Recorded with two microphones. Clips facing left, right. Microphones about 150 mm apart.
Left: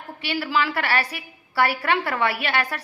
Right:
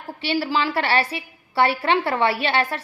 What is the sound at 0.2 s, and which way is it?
A woman's voice, 30° right (ahead or behind).